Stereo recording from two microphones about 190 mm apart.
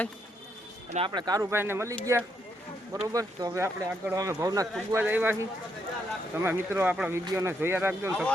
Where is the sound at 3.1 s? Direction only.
20° right (ahead or behind).